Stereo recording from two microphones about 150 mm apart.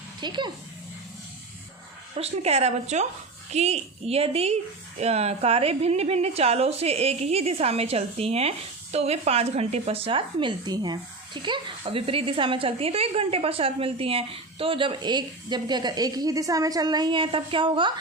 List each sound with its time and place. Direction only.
0.2 s speech: 30° right (ahead or behind)
2.1 s a woman's voice: 45° right (ahead or behind)